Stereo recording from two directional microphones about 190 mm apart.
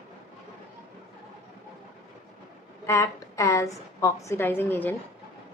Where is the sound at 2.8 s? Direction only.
15° left (ahead or behind).